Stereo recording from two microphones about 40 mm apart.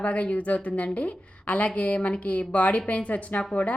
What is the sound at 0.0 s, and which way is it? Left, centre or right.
A woman's voice, left.